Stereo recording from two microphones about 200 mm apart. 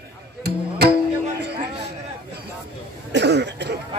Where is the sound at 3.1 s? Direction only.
60° right (ahead or behind).